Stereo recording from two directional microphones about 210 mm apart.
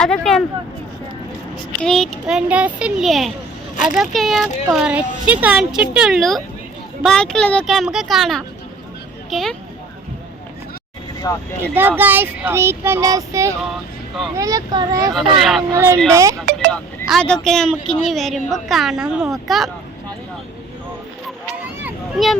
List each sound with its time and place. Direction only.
0.0 s speech: 5° left (ahead or behind)
1.8 s speech: centre (ahead or behind)
11.3 s speech: 15° left (ahead or behind)
11.6 s speech: 10° right (ahead or behind)
15.1 s speech: centre (ahead or behind)
15.7 s speech: 15° right (ahead or behind)
16.7 s speech: 5° left (ahead or behind)
21.8 s a sound: centre (ahead or behind)